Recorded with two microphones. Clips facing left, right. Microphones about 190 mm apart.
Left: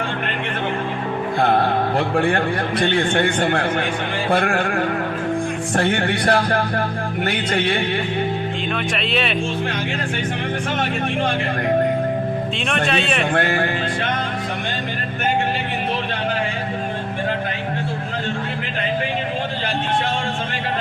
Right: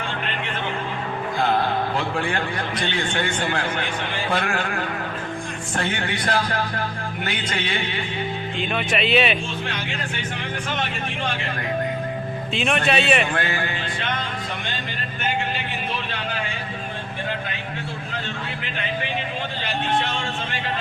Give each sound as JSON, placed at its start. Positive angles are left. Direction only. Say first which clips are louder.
{"t": 1.4, "sound": "a man's voice", "louder": "left 4 dB", "side_deg": 55}
{"t": 8.7, "sound": "speech", "louder": "right 4 dB", "side_deg": 0}
{"t": 12.5, "sound": "speech", "louder": "right 3 dB", "side_deg": -5}
{"t": 13.3, "sound": "music", "louder": "left 6 dB", "side_deg": 55}